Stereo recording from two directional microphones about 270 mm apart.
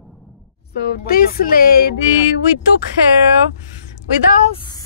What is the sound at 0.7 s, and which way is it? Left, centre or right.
Speech, left.